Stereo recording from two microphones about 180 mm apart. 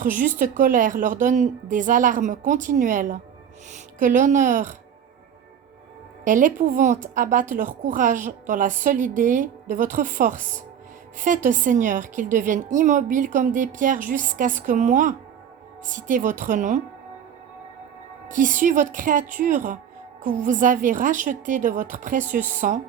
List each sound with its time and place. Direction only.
0.0 s a woman's voice: 45° right (ahead or behind)
6.2 s a woman's voice: 45° right (ahead or behind)
18.3 s a woman's voice: 45° right (ahead or behind)